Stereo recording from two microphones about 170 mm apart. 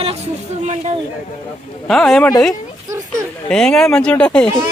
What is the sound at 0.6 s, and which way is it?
Speech, 40° right (ahead or behind).